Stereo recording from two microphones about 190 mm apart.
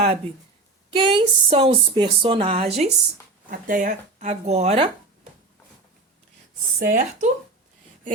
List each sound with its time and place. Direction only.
0.9 s speech: 25° right (ahead or behind)
3.5 s speech: 45° right (ahead or behind)
6.7 s speech: 45° right (ahead or behind)